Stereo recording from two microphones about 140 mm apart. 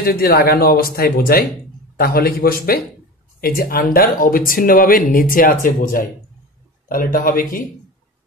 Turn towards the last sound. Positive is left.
turn(degrees=90)